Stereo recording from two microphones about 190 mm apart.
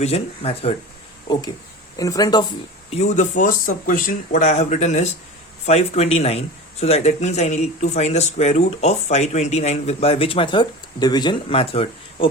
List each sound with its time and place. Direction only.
0.0 s speech: 30° left (ahead or behind)
2.0 s speech: 20° left (ahead or behind)
2.9 s speech: 35° left (ahead or behind)